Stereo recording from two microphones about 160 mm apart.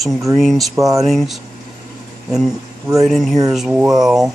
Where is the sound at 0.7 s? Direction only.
20° right (ahead or behind).